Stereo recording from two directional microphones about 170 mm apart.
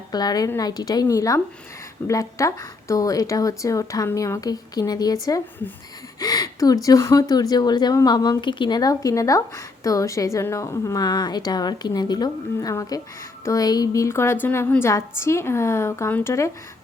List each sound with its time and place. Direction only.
0.1 s a woman's voice: 25° left (ahead or behind)